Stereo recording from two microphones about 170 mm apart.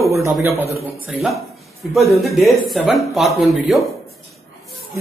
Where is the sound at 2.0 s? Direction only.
Centre (ahead or behind).